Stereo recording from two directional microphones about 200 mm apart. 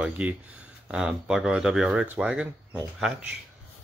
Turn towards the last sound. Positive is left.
turn(degrees=-5)  # may be behind; listen again after turning